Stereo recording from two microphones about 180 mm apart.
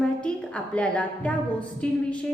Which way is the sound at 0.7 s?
5° left (ahead or behind).